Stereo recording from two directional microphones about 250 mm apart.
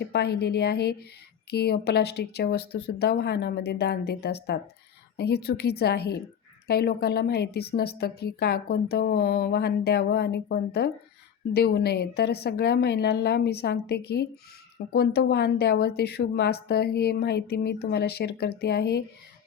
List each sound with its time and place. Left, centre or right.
0.0 s a woman's voice: left